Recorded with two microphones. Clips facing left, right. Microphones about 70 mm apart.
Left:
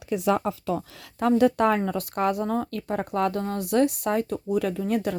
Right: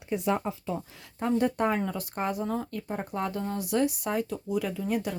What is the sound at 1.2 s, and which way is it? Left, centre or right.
Speech, left.